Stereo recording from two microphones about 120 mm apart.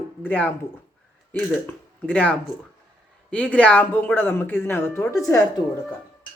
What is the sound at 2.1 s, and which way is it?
Speech, 10° left (ahead or behind).